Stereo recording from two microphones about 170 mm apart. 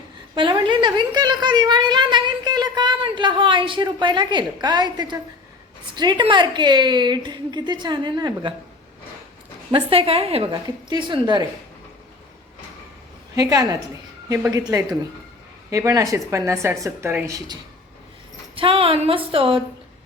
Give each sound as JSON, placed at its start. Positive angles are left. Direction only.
{"t": 0.3, "sound": "a woman's voice", "side_deg": -30}
{"t": 9.7, "sound": "a woman's voice", "side_deg": -35}
{"t": 13.3, "sound": "a woman's voice", "side_deg": -20}
{"t": 18.5, "sound": "speech", "side_deg": -30}